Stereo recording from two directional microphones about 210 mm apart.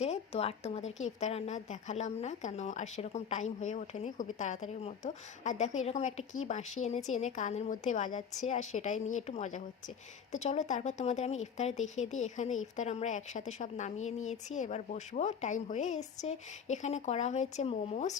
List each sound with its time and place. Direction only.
0.0 s speech: 30° left (ahead or behind)